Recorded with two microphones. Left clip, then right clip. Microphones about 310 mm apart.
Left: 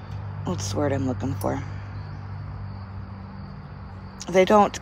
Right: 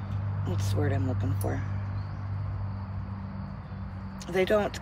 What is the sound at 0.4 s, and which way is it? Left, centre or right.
Speech, left.